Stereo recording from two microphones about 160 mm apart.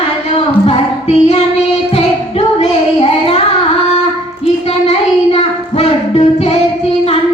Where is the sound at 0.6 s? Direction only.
40° left (ahead or behind).